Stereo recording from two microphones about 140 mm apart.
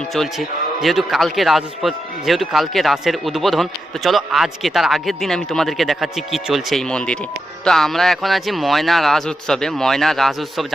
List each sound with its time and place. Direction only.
0.1 s a man's voice: centre (ahead or behind)